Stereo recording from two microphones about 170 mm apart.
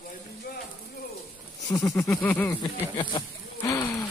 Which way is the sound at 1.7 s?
15° left (ahead or behind).